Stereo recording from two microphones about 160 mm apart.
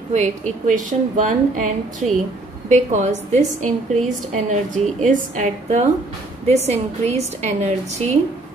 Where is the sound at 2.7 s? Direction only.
50° right (ahead or behind).